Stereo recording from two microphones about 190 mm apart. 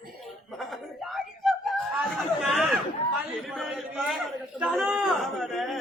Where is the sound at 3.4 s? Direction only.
Centre (ahead or behind).